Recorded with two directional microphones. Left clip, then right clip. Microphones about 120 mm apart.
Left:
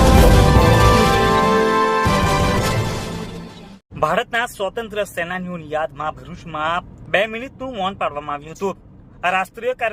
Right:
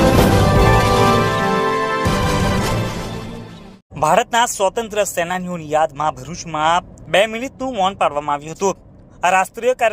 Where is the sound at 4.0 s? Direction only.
20° right (ahead or behind).